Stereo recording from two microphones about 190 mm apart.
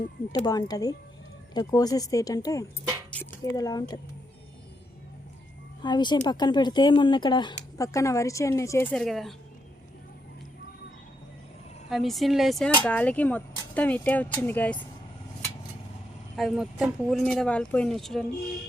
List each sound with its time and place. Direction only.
0.3 s speech: 20° left (ahead or behind)
5.8 s speech: 25° left (ahead or behind); by 9.3 s centre (ahead or behind)
11.9 s speech: centre (ahead or behind)
16.3 s speech: centre (ahead or behind)